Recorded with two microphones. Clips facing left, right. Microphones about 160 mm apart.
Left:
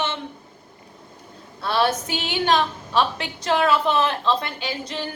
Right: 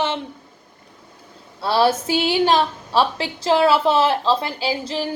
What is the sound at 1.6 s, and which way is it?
A woman's voice, 30° right (ahead or behind).